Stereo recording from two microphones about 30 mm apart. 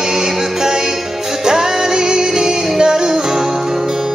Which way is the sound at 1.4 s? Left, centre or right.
Centre.